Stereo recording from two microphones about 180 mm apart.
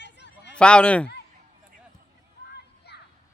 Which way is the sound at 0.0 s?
75° left (ahead or behind).